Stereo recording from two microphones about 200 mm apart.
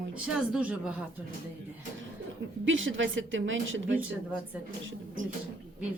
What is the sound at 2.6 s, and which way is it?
A woman's voice, 75° right (ahead or behind).